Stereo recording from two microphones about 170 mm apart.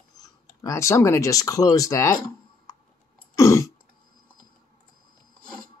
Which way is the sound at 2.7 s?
25° left (ahead or behind).